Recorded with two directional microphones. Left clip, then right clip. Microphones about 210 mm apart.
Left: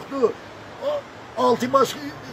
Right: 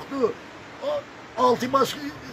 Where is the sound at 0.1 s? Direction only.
Centre (ahead or behind).